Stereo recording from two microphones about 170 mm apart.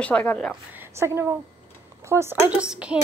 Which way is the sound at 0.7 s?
15° right (ahead or behind).